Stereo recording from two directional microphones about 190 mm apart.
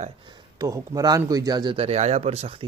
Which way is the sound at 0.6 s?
20° right (ahead or behind).